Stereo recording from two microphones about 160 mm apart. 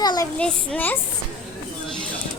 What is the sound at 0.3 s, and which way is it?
Speech, 5° left (ahead or behind).